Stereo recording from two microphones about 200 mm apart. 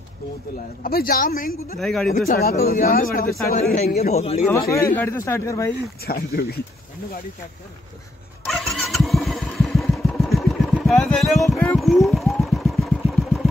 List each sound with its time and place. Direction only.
0.8 s a man's voice: 50° left (ahead or behind)
1.8 s speech: centre (ahead or behind)
2.0 s a man's voice: 50° left (ahead or behind); by 4.4 s 30° left (ahead or behind)
4.5 s speech: 15° left (ahead or behind)
6.0 s a man's voice: 50° left (ahead or behind)
8.5 s vehicle: centre (ahead or behind)
10.9 s speech: centre (ahead or behind)
11.5 s vehicle: 5° left (ahead or behind)